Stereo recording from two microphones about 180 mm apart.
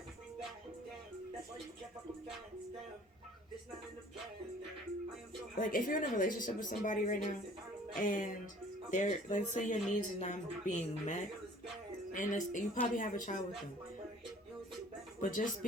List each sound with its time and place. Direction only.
5.5 s a woman's voice: 45° left (ahead or behind)